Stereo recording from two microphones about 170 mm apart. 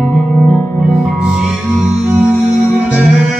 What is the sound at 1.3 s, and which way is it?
Music, 5° right (ahead or behind).